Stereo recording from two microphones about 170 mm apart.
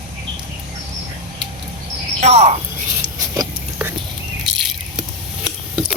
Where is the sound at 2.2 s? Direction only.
40° right (ahead or behind).